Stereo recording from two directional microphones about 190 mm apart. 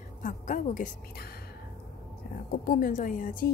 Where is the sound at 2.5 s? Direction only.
45° left (ahead or behind).